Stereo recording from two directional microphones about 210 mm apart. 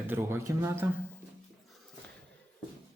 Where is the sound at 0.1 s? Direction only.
10° right (ahead or behind).